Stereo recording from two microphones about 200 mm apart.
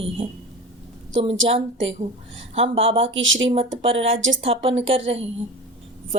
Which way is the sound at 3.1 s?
70° right (ahead or behind).